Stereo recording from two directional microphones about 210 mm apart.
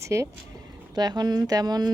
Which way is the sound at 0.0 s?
15° right (ahead or behind).